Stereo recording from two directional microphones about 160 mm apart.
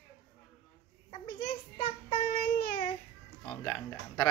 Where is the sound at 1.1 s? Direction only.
40° left (ahead or behind).